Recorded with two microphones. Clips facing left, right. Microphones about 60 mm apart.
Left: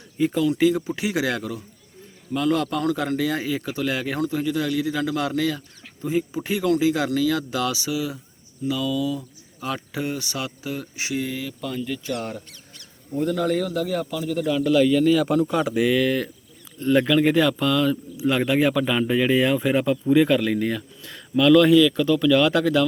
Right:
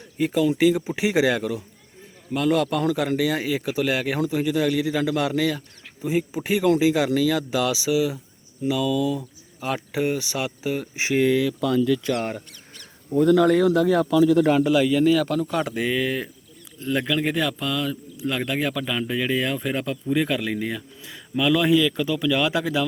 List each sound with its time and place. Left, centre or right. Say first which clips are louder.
0.3 s speech: right 1 dB; centre
2.3 s speech: right 1 dB; centre
6.6 s speech: right 2 dB; right
9.0 s speech: right 2 dB; right
9.6 s speech: right 3 dB; centre
11.1 s speech: right 9 dB; right
13.2 s speech: right 6 dB; right
14.6 s speech: left 1 dB; centre
16.0 s speech: left 3 dB; centre
16.8 s speech: left 5 dB; centre